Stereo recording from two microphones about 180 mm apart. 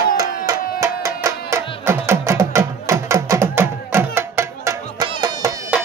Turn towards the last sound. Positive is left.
turn(degrees=-20)  # may be behind; listen again after turning